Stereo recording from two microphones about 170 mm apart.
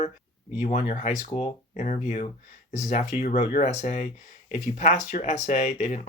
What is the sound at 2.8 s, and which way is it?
Speech, 45° left (ahead or behind).